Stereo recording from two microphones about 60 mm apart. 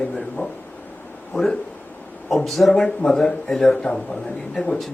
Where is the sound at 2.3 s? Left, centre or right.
Centre.